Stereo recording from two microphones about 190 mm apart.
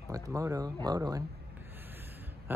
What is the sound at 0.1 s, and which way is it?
Speech, 15° right (ahead or behind).